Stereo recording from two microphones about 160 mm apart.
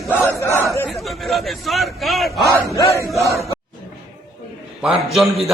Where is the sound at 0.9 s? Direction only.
Centre (ahead or behind).